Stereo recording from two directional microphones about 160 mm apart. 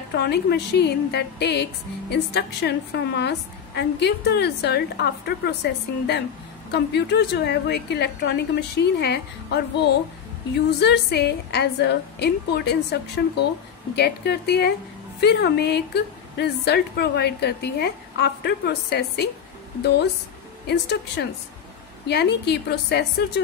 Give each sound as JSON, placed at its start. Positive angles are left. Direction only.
{"t": 0.1, "sound": "a woman's voice", "side_deg": 90}
{"t": 10.8, "sound": "a woman's voice", "side_deg": 90}
{"t": 20.6, "sound": "a woman's voice", "side_deg": 90}